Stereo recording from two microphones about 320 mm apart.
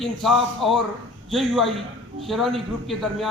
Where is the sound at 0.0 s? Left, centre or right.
Centre.